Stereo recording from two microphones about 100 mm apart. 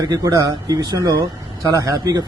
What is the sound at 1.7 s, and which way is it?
Speech, 35° right (ahead or behind).